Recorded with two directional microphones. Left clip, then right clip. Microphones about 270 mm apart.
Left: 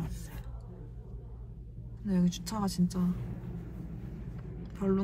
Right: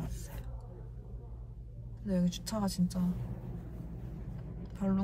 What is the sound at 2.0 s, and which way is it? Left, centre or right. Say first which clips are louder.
Speech: left 1 dB; centre.